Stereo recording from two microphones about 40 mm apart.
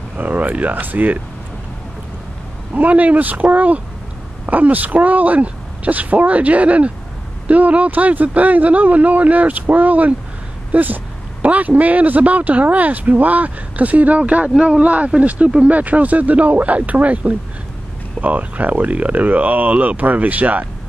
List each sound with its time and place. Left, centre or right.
0.2 s speech: right
2.7 s speech: right
11.4 s speech: right